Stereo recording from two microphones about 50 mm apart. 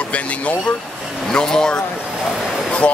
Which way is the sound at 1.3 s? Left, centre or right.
Centre.